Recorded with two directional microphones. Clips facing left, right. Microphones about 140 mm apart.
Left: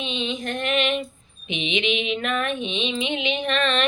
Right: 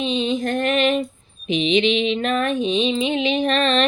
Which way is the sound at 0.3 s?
40° right (ahead or behind).